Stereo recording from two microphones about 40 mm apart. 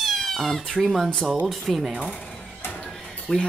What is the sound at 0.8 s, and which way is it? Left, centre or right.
Speech, centre.